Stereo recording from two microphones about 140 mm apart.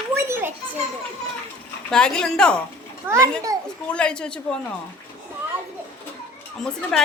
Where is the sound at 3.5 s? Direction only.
25° right (ahead or behind).